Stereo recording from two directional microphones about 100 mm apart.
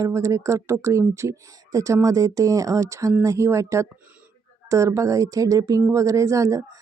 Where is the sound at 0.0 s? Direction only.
30° right (ahead or behind).